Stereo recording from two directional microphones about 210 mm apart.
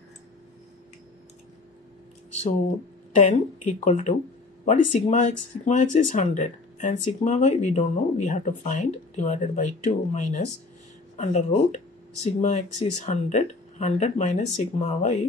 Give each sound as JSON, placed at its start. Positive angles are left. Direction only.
{"t": 3.2, "sound": "speech", "side_deg": 35}